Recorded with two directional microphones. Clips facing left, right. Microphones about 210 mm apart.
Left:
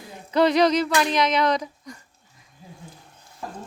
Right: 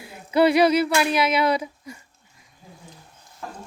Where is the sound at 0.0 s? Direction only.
10° right (ahead or behind).